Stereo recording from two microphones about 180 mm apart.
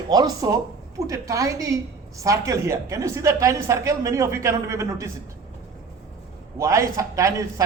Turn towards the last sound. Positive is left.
turn(degrees=-15)  # may be behind; listen again after turning